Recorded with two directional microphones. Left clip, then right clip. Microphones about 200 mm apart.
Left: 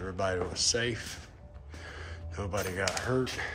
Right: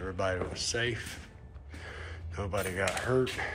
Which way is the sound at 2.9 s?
10° left (ahead or behind).